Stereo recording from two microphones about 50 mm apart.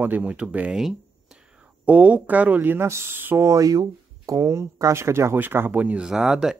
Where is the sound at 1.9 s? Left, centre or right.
Right.